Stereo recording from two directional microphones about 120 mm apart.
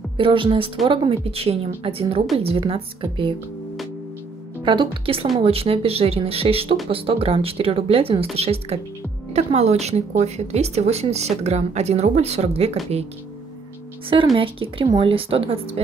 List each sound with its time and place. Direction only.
0.2 s speech: 45° right (ahead or behind)
4.6 s speech: 45° right (ahead or behind); by 12.7 s 60° right (ahead or behind)
14.1 s speech: 45° right (ahead or behind)